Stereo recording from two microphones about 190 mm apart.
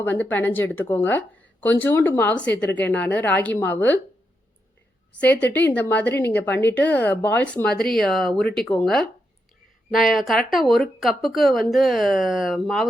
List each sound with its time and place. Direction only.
0.0 s speech: 10° left (ahead or behind)
5.1 s a woman's voice: 10° left (ahead or behind)